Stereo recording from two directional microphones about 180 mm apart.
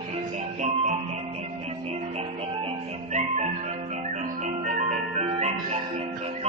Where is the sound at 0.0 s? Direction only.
40° right (ahead or behind).